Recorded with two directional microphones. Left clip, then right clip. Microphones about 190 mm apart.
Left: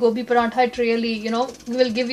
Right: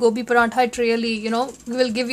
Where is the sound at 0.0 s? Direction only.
40° right (ahead or behind).